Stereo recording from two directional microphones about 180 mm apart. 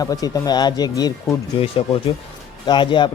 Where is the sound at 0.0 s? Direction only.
20° left (ahead or behind).